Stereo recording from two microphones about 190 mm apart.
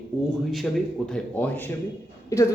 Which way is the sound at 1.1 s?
5° left (ahead or behind).